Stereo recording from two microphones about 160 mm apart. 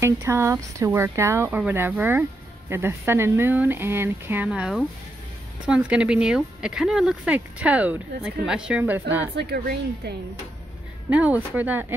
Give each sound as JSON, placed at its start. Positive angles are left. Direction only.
{"t": 0.0, "sound": "speech", "side_deg": -15}
{"t": 9.3, "sound": "speech", "side_deg": -90}
{"t": 11.1, "sound": "speech", "side_deg": -10}